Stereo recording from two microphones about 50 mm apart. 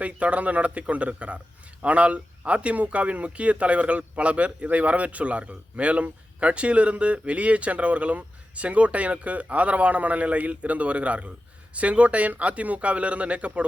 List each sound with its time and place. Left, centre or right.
0.0 s a man's voice: right